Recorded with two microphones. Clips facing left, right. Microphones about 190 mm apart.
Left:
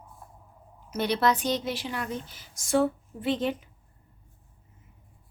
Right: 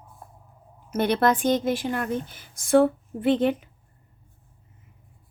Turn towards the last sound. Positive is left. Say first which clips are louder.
# right 6 dB
turn(degrees=-55)  # may be behind; listen again after turning